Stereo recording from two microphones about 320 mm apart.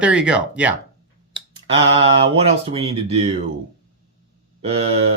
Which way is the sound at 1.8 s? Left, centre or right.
Centre.